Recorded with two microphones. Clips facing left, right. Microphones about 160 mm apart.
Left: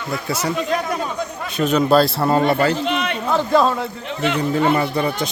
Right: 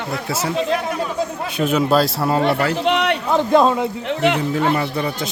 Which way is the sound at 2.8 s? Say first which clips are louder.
Right 4 dB; 75° right (ahead or behind).